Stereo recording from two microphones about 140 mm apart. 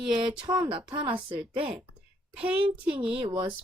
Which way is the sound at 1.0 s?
10° right (ahead or behind).